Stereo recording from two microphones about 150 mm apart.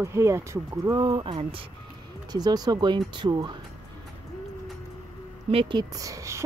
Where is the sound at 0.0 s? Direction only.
20° right (ahead or behind); by 1.7 s 35° right (ahead or behind).